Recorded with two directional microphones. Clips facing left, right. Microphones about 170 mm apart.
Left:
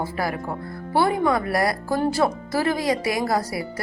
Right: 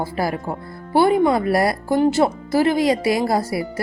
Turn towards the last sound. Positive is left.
turn(degrees=-25)  # may be behind; listen again after turning